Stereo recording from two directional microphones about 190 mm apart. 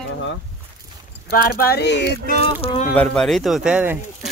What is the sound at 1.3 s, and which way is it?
Speech, 50° left (ahead or behind).